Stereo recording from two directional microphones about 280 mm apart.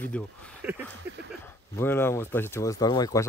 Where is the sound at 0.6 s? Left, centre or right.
Centre.